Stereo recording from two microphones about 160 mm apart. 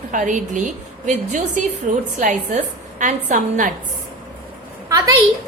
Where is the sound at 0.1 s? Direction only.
50° right (ahead or behind).